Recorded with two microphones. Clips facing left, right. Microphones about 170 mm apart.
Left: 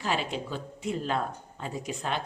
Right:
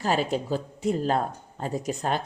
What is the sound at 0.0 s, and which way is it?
Speech, 40° right (ahead or behind).